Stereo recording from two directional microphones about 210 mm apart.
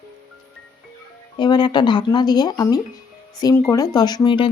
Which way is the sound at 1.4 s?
20° left (ahead or behind).